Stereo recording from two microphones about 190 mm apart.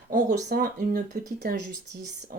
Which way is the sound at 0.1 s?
40° right (ahead or behind).